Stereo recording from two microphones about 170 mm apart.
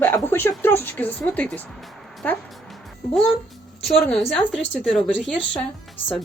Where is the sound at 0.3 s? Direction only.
10° left (ahead or behind).